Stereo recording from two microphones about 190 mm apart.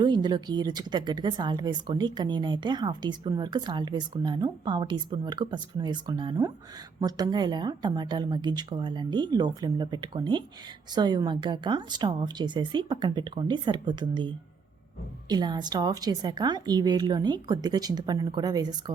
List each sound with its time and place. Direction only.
0.0 s speech: 20° right (ahead or behind)